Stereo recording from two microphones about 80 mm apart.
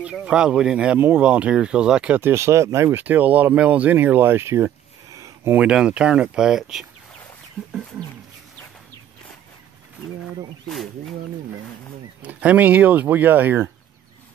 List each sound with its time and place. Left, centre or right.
0.2 s speech: centre
0.9 s speech: right
1.2 s speech: centre
2.1 s speech: right
3.0 s speech: right
5.5 s speech: centre
7.6 s speech: centre
10.7 s speech: centre
12.2 s speech: centre